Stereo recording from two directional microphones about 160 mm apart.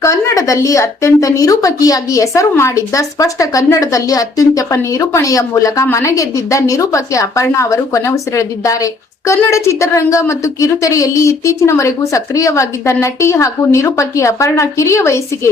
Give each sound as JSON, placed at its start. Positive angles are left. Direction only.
{"t": 0.0, "sound": "speech", "side_deg": 20}